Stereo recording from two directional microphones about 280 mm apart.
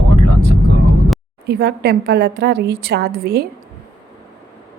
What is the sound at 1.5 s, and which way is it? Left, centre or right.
A woman's voice, right.